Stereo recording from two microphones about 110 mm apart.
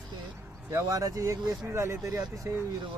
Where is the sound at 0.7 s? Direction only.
30° right (ahead or behind).